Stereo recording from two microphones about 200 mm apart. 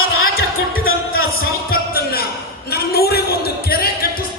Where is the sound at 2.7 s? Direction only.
50° left (ahead or behind).